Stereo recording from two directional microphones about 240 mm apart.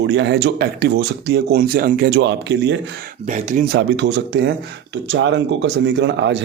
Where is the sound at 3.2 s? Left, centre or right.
Right.